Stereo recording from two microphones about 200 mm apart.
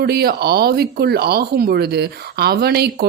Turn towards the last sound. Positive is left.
turn(degrees=-55)  # may be behind; listen again after turning